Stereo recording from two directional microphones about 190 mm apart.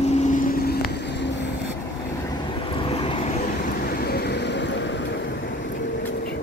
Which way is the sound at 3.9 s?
55° left (ahead or behind).